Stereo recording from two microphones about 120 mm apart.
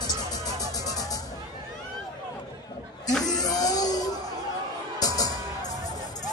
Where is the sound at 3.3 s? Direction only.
30° left (ahead or behind).